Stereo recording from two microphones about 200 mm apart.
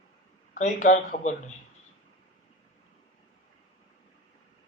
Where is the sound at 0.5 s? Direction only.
40° left (ahead or behind).